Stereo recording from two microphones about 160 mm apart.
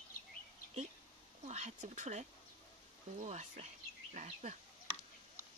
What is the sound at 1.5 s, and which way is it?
Speech, 45° right (ahead or behind).